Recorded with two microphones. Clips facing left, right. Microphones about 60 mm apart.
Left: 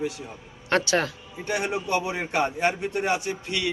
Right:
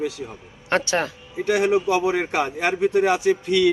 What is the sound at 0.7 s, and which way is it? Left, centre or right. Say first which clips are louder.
Speech: right 1 dB; centre.